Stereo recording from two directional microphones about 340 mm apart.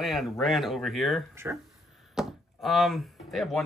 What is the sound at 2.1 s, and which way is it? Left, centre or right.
Chop, centre.